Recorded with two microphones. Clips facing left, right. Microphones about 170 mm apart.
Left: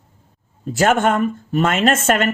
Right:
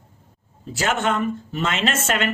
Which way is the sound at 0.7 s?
50° left (ahead or behind).